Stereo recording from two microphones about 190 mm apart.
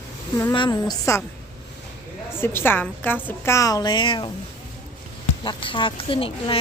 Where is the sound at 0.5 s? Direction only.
25° left (ahead or behind).